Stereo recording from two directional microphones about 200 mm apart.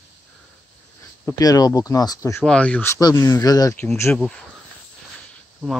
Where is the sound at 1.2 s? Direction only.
20° left (ahead or behind).